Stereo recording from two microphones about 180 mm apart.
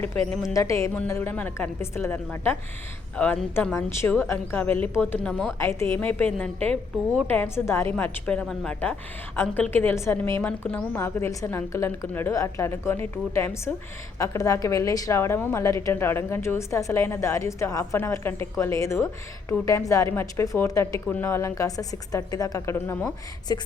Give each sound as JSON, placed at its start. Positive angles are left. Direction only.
{"t": 0.5, "sound": "a woman's voice", "side_deg": 15}